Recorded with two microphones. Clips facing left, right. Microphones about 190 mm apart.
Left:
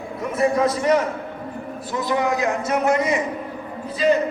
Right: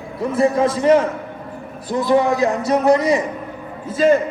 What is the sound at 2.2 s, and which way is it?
A man's voice, 35° right (ahead or behind).